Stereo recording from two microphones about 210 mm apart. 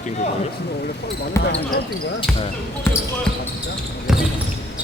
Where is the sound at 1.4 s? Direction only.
15° left (ahead or behind).